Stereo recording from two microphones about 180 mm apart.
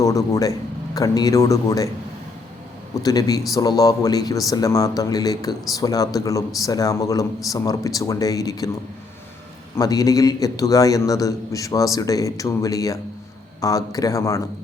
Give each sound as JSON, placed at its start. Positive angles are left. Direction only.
{"t": 0.0, "sound": "a man's voice", "side_deg": 20}
{"t": 2.9, "sound": "a man's voice", "side_deg": 20}
{"t": 9.7, "sound": "a man's voice", "side_deg": 20}